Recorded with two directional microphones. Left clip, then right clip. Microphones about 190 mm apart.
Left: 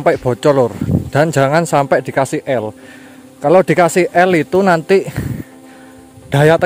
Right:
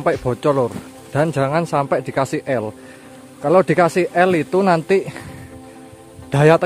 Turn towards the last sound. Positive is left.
turn(degrees=15)  # may be behind; listen again after turning